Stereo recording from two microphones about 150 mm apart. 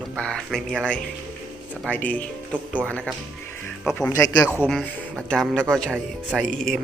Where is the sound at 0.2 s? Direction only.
5° left (ahead or behind).